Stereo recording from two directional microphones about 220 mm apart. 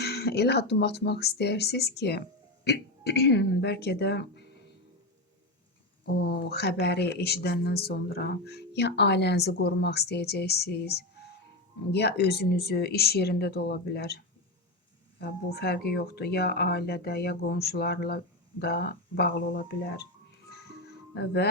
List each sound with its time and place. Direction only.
0.0 s speech: 45° left (ahead or behind)
6.1 s speech: 45° left (ahead or behind)
15.2 s speech: 45° left (ahead or behind)
20.5 s music: 45° left (ahead or behind)
21.2 s speech: 50° left (ahead or behind)